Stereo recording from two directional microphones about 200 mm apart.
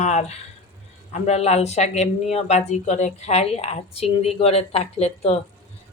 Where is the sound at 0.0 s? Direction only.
35° left (ahead or behind).